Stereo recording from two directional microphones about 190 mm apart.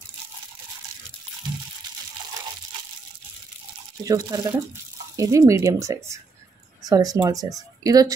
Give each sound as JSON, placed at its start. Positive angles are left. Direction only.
{"t": 4.0, "sound": "speech", "side_deg": -20}